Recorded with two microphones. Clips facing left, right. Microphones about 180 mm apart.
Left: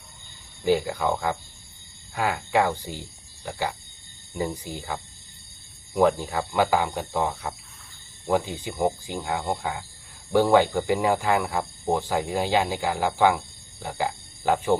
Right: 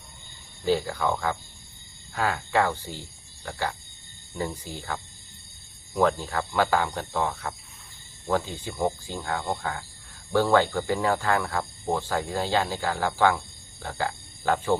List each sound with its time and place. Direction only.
0.6 s speech: 15° left (ahead or behind)
2.1 s cricket: 15° left (ahead or behind)
4.4 s speech: 15° left (ahead or behind)